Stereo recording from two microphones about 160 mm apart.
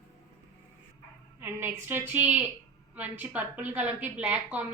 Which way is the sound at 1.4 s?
15° right (ahead or behind).